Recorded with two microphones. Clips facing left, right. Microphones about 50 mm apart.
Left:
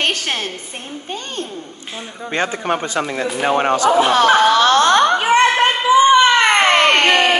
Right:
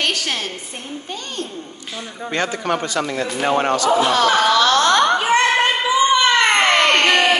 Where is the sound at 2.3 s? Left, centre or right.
Left.